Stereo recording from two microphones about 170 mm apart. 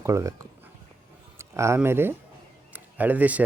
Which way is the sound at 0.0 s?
15° right (ahead or behind).